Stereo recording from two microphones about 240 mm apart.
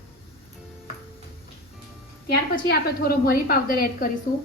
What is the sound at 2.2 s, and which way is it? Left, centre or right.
A woman's voice, left.